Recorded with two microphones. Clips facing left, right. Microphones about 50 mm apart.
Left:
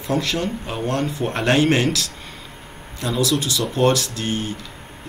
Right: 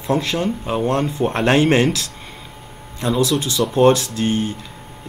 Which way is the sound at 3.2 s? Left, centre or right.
Right.